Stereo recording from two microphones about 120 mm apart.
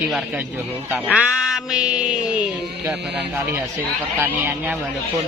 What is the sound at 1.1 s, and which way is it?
Speech, 5° right (ahead or behind).